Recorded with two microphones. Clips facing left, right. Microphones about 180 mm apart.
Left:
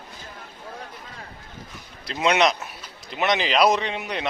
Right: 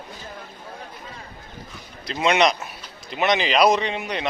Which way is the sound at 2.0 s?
Centre (ahead or behind).